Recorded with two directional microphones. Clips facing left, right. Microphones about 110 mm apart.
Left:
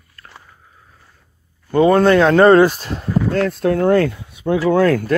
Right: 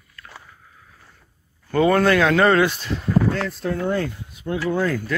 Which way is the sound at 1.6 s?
25° left (ahead or behind).